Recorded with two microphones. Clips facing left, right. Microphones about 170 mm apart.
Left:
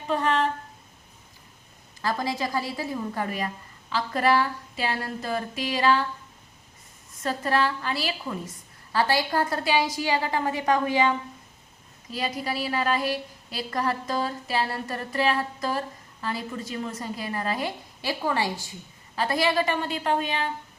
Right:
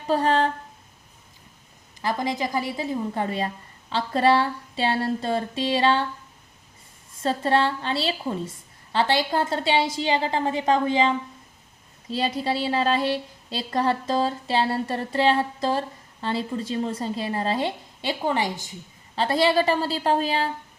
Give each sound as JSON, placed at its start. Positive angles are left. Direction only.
{"t": 0.1, "sound": "speech", "side_deg": -35}
{"t": 2.0, "sound": "speech", "side_deg": -20}
{"t": 7.2, "sound": "speech", "side_deg": -30}
{"t": 12.1, "sound": "speech", "side_deg": -30}